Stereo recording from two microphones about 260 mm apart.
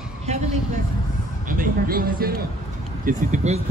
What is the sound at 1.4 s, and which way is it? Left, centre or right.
A woman's voice, right.